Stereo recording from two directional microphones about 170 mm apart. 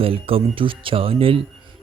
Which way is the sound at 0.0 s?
35° right (ahead or behind).